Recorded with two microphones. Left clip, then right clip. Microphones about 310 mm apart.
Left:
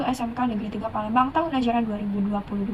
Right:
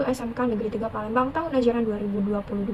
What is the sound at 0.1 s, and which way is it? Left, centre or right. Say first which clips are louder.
A woman's voice: even; centre.